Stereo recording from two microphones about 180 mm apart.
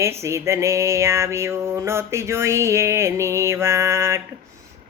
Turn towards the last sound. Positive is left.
turn(degrees=-15)  # may be behind; listen again after turning